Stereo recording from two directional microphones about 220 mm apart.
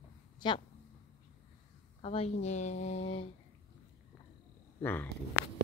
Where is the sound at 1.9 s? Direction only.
25° left (ahead or behind).